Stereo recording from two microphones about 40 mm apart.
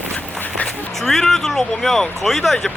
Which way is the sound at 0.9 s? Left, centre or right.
Centre.